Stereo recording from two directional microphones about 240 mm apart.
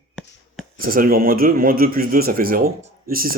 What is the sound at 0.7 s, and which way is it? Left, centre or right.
A man's voice, right.